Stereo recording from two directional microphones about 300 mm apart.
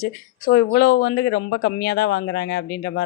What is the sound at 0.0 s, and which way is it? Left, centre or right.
A woman's voice, left.